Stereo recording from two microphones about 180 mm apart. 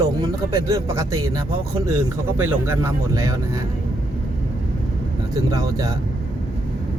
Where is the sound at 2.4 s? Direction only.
15° right (ahead or behind).